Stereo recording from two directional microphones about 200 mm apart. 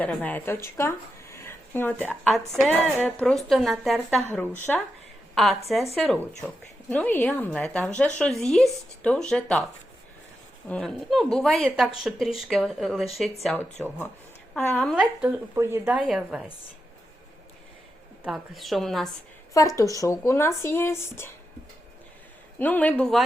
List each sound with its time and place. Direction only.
0.0 s speech: 5° left (ahead or behind)
4.4 s a woman's voice: 10° left (ahead or behind)
10.7 s a woman's voice: 5° left (ahead or behind)
14.9 s a woman's voice: 10° right (ahead or behind)
18.2 s a woman's voice: centre (ahead or behind)
19.5 s speech: 15° left (ahead or behind)
22.5 s speech: 10° left (ahead or behind)